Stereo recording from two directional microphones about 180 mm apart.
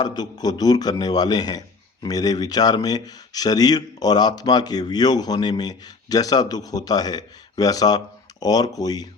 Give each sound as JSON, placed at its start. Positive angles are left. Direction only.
{"t": 0.0, "sound": "a man's voice", "side_deg": 25}